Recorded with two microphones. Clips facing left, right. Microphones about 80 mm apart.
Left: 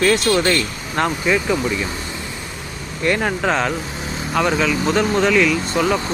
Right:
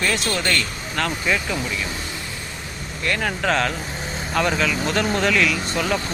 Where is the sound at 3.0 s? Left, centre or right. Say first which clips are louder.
Left 5 dB; centre.